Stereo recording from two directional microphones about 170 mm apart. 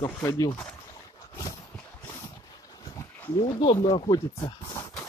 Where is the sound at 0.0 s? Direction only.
15° left (ahead or behind).